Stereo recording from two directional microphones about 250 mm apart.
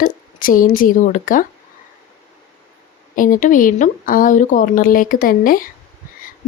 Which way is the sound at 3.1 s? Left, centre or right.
Left.